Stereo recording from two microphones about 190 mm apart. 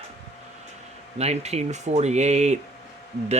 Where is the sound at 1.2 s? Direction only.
35° right (ahead or behind).